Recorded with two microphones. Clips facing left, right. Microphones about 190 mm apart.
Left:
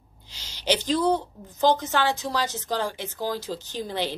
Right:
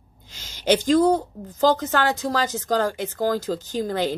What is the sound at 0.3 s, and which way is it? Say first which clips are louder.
Speech: right 5 dB; 50° right (ahead or behind).